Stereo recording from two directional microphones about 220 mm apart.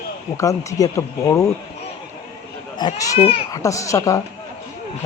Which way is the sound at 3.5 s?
15° left (ahead or behind).